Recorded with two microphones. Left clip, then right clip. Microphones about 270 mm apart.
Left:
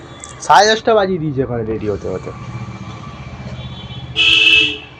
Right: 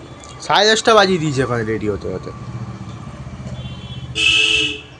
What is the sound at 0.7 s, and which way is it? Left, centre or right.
Speech, centre.